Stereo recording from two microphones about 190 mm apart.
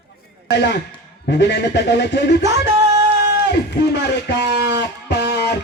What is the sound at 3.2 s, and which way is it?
Speech, 65° left (ahead or behind).